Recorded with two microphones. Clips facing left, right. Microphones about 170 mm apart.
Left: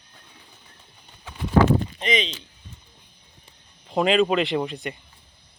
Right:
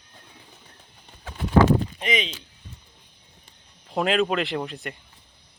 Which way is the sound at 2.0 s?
10° right (ahead or behind).